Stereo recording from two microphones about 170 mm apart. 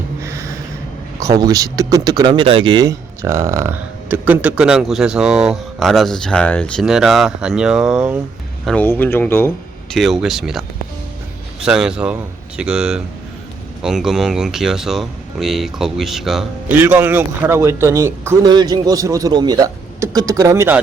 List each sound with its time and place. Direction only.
0.2 s gasp: 15° right (ahead or behind)
1.2 s speech: 20° right (ahead or behind)
8.6 s speech: 10° left (ahead or behind)
9.9 s speech: centre (ahead or behind)